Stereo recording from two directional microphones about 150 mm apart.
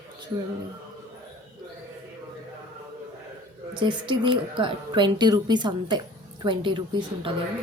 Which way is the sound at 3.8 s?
35° right (ahead or behind).